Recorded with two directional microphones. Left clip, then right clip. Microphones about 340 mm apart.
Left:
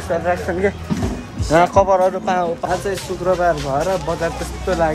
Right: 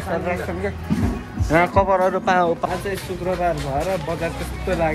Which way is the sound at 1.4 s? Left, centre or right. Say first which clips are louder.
Left 4 dB; centre.